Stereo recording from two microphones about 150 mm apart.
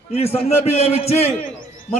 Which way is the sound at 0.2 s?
45° left (ahead or behind).